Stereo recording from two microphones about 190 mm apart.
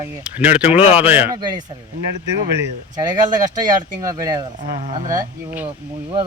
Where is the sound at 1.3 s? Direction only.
20° right (ahead or behind).